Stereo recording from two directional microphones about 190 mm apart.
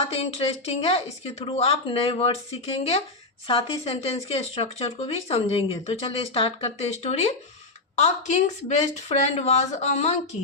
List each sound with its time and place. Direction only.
0.1 s speech: 30° left (ahead or behind)